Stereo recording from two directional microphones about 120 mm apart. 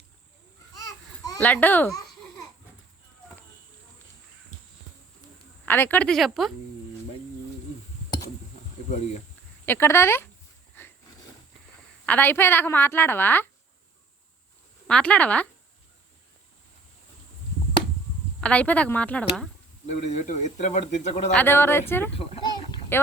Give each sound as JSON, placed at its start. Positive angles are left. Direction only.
{"t": 0.8, "sound": "babbling", "side_deg": 30}
{"t": 1.4, "sound": "a woman's voice", "side_deg": 10}
{"t": 5.6, "sound": "a woman's voice", "side_deg": 15}
{"t": 9.6, "sound": "speech", "side_deg": 20}
{"t": 12.0, "sound": "a woman's voice", "side_deg": 15}
{"t": 14.8, "sound": "a woman's voice", "side_deg": 10}
{"t": 18.3, "sound": "a woman's voice", "side_deg": 10}
{"t": 19.9, "sound": "speech", "side_deg": 80}
{"t": 21.3, "sound": "speech", "side_deg": 20}
{"t": 22.1, "sound": "a child's voice", "side_deg": 55}
{"t": 22.9, "sound": "a woman's voice", "side_deg": 15}